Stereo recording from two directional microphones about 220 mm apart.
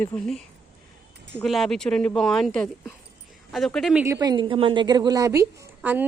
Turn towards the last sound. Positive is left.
turn(degrees=-10)  # may be behind; listen again after turning